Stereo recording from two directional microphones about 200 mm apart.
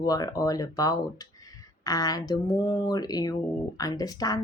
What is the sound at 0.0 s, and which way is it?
Speech, 20° left (ahead or behind).